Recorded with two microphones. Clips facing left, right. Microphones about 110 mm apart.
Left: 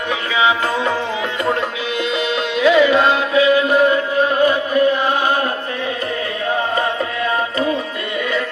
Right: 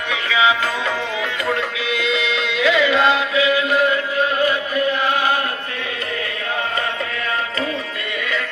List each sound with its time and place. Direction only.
0.1 s music: 30° left (ahead or behind)
2.0 s music: 45° left (ahead or behind)
3.3 s chant: 35° left (ahead or behind)